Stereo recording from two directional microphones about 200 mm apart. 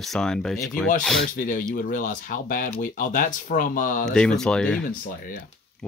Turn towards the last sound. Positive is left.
turn(degrees=5)  # may be behind; listen again after turning